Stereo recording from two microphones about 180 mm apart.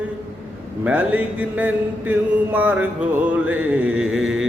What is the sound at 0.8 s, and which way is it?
Mantra, 5° right (ahead or behind).